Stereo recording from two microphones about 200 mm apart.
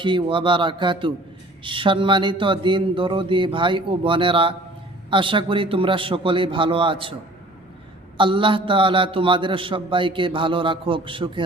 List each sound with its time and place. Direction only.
0.0 s a man's voice: 25° right (ahead or behind)
8.2 s a man's voice: 25° right (ahead or behind)